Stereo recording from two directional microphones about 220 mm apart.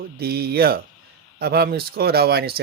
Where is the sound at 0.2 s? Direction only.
45° right (ahead or behind).